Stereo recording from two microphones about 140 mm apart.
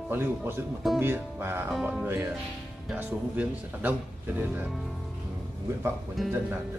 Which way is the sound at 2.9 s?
10° right (ahead or behind).